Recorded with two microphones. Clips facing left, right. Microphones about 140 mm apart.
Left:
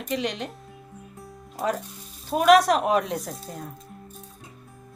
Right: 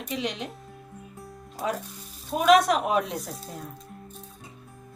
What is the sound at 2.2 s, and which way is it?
Speech, centre (ahead or behind).